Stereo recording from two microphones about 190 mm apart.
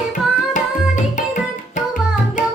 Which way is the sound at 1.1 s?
40° left (ahead or behind).